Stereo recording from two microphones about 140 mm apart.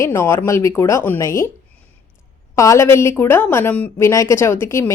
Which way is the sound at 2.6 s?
20° left (ahead or behind).